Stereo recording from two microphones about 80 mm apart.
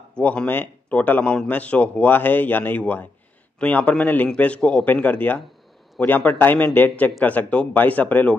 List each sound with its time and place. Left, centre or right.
0.1 s a man's voice: centre